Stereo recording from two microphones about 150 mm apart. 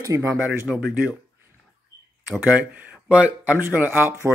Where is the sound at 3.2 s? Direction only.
10° right (ahead or behind).